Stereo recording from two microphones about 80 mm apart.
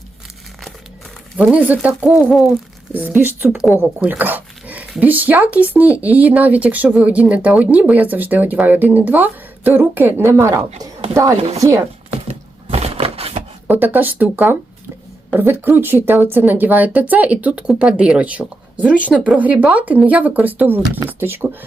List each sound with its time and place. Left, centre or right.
1.4 s speech: centre
2.9 s speech: right
3.5 s speech: centre
3.8 s speech: centre
10.8 s speech: right
13.7 s speech: right